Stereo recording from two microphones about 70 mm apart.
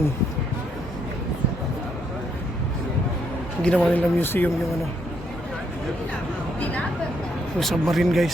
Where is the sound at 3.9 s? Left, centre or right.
Left.